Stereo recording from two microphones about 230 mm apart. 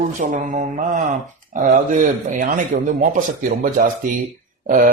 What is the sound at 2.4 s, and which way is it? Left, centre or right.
Speech, right.